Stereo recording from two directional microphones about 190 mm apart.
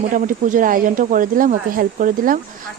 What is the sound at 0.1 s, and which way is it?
Speech, 45° right (ahead or behind).